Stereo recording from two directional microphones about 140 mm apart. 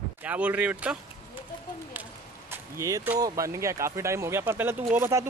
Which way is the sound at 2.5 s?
20° right (ahead or behind).